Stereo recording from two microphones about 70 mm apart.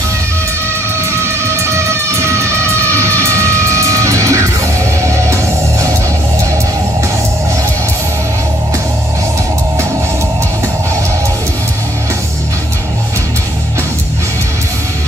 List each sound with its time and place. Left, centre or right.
1.2 s music: right